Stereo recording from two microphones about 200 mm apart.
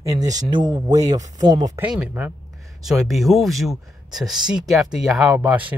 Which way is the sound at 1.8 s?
5° right (ahead or behind).